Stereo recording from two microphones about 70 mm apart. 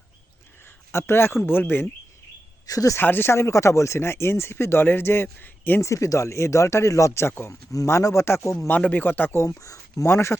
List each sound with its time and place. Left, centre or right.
0.9 s speech: left
2.6 s speech: left
3.0 s speech: left
5.8 s speech: left
8.7 s speech: left
9.4 s speech: left